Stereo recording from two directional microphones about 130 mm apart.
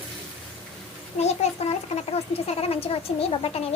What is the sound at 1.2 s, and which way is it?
A child's voice, 55° left (ahead or behind).